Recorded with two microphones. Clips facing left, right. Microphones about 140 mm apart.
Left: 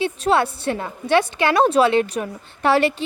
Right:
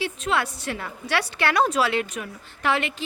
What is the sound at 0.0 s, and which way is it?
A woman's voice, 30° left (ahead or behind).